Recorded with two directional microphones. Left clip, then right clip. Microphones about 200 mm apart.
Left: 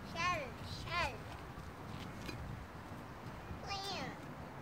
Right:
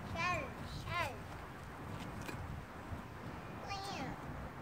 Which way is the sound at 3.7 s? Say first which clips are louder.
Left 2 dB; 25° left (ahead or behind).